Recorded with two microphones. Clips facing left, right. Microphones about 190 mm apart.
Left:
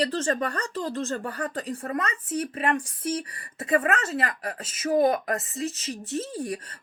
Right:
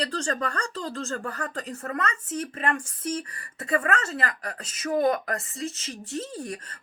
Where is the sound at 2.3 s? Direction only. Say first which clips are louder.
Left 3 dB; 35° left (ahead or behind).